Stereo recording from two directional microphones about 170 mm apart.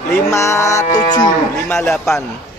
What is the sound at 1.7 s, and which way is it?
Speech, 5° left (ahead or behind).